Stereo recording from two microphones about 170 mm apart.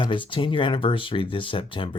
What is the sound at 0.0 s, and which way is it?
Speech, 30° left (ahead or behind).